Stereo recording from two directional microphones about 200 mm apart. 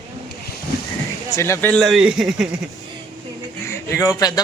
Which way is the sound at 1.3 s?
15° left (ahead or behind).